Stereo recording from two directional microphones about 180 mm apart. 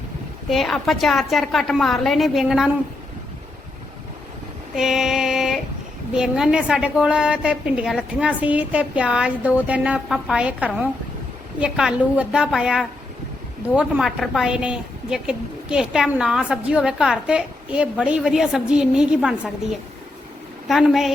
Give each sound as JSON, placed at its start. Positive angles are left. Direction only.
{"t": 0.5, "sound": "a woman's voice", "side_deg": 0}
{"t": 4.7, "sound": "female singing", "side_deg": -5}
{"t": 6.1, "sound": "a woman's voice", "side_deg": -5}
{"t": 20.7, "sound": "a woman's voice", "side_deg": 0}